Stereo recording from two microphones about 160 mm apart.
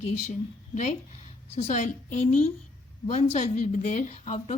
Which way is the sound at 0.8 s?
45° left (ahead or behind).